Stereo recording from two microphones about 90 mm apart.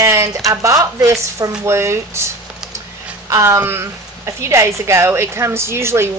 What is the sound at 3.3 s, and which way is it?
Speech, 30° right (ahead or behind).